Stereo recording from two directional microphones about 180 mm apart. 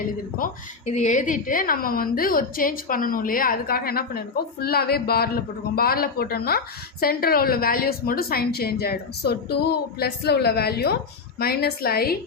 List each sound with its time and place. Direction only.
0.3 s a woman's voice: 45° left (ahead or behind)